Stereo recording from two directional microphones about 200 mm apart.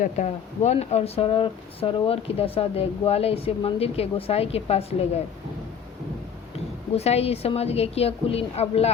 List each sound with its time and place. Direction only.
0.0 s speech: 35° left (ahead or behind)
6.9 s a woman's voice: 30° left (ahead or behind)